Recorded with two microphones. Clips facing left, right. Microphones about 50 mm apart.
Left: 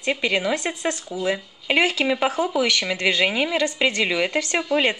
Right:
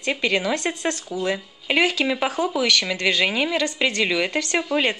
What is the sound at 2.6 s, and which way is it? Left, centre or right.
Speech, centre.